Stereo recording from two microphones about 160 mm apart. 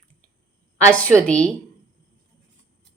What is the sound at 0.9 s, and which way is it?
Speech, 10° left (ahead or behind).